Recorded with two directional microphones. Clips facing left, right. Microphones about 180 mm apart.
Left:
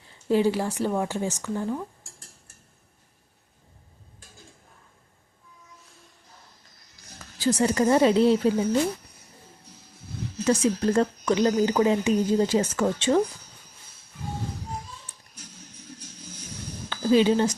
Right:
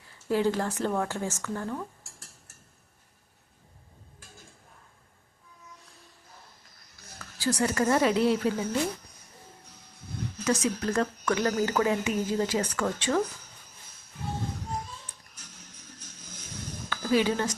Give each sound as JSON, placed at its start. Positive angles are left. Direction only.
{"t": 0.1, "sound": "speech", "side_deg": 20}
{"t": 5.8, "sound": "music", "side_deg": 0}
{"t": 7.2, "sound": "a woman's voice", "side_deg": 20}
{"t": 10.4, "sound": "a woman's voice", "side_deg": 30}
{"t": 16.9, "sound": "a woman's voice", "side_deg": 25}